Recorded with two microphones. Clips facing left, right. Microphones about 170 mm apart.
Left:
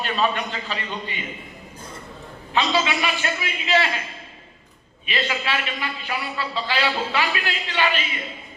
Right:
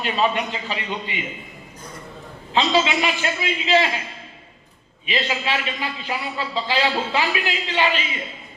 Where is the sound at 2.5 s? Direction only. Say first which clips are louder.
Right 3 dB; 25° right (ahead or behind).